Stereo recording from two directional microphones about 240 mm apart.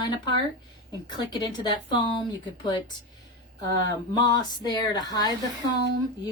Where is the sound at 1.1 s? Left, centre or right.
Centre.